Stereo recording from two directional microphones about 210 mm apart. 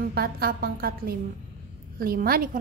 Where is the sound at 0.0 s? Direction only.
50° right (ahead or behind).